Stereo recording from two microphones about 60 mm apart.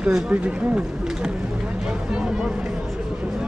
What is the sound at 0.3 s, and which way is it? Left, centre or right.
Speech, centre.